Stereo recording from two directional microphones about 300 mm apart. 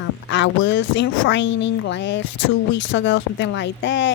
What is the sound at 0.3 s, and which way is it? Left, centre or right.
Speech, left.